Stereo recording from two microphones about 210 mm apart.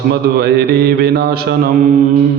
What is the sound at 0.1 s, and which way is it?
Mantra, 50° right (ahead or behind).